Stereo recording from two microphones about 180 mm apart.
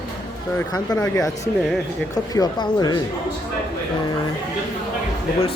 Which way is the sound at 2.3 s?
20° left (ahead or behind).